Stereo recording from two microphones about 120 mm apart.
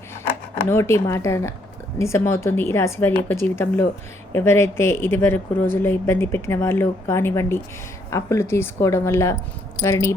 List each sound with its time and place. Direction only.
0.7 s a woman's voice: 20° left (ahead or behind)